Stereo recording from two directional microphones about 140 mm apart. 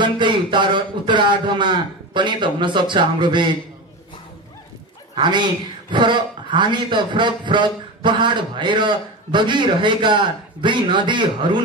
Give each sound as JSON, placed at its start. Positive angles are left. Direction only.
{"t": 0.0, "sound": "speech", "side_deg": -35}
{"t": 5.1, "sound": "speech", "side_deg": -35}